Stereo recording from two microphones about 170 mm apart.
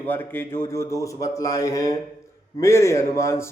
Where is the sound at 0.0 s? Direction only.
10° left (ahead or behind).